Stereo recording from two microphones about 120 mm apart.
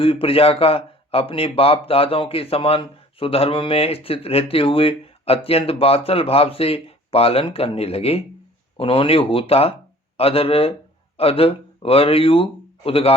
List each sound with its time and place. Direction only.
0.0 s speech: 50° left (ahead or behind)